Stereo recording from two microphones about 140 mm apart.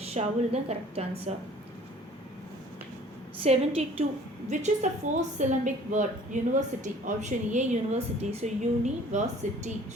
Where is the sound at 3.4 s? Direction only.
45° right (ahead or behind).